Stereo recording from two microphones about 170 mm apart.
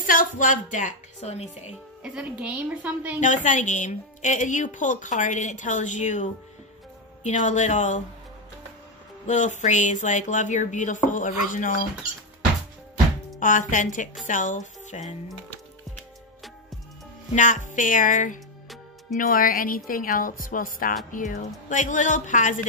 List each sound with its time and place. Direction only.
0.0 s a woman's voice: 50° left (ahead or behind)
2.1 s a woman's voice: 5° right (ahead or behind)
3.2 s a woman's voice: 45° left (ahead or behind)
7.2 s a woman's voice: 45° left (ahead or behind)
9.2 s a woman's voice: 45° left (ahead or behind)
13.4 s a woman's voice: 50° left (ahead or behind)
17.4 s a woman's voice: 50° left (ahead or behind)